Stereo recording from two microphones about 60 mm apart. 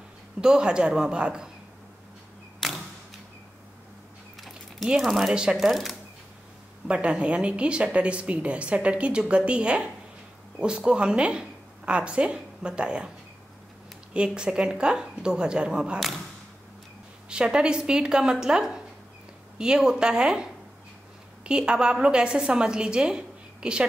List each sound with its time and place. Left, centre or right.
0.4 s a woman's voice: centre
2.6 s camera: centre
4.8 s speech: centre
5.3 s a woman's voice: centre
5.6 s speech: centre
6.9 s a woman's voice: centre
14.1 s a woman's voice: centre
17.3 s a woman's voice: centre
21.5 s a woman's voice: centre